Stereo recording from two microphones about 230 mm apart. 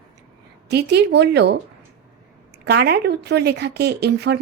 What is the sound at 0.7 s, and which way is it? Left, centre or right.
Speech, right.